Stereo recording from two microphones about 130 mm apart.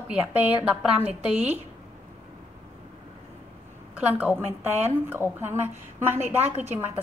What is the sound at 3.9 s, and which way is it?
A woman's voice, 10° right (ahead or behind).